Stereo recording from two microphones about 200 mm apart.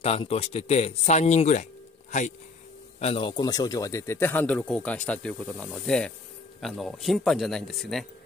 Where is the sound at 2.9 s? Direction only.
30° left (ahead or behind).